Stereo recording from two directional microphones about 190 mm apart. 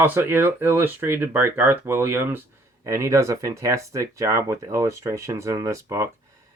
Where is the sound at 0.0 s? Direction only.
10° right (ahead or behind).